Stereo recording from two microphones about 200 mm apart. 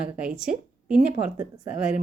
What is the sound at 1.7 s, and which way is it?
Speech, 5° right (ahead or behind).